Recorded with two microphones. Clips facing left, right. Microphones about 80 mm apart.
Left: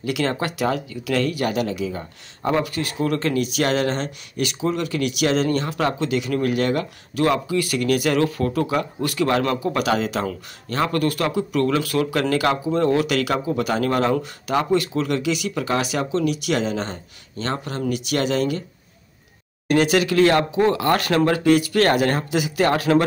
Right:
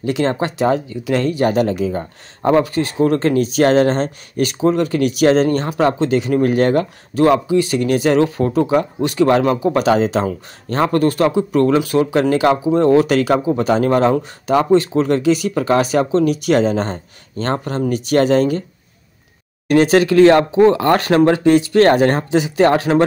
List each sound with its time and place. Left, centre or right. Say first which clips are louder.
0.0 s speech: right 5 dB; right
19.7 s speech: right 6 dB; right